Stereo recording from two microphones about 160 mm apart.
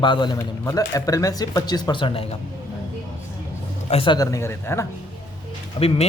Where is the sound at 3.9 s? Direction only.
35° left (ahead or behind).